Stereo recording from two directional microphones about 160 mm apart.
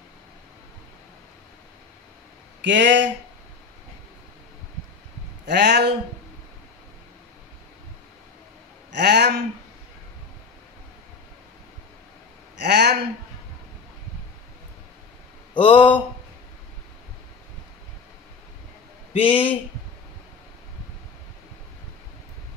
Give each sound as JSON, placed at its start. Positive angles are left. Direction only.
{"t": 2.6, "sound": "speech", "side_deg": -90}
{"t": 5.4, "sound": "speech", "side_deg": -90}
{"t": 8.9, "sound": "speech", "side_deg": -90}
{"t": 12.5, "sound": "speech", "side_deg": -90}
{"t": 15.5, "sound": "speech", "side_deg": 30}
{"t": 19.2, "sound": "speech", "side_deg": 35}